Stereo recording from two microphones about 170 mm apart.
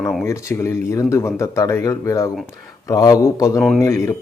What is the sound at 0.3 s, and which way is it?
Speech, 15° left (ahead or behind).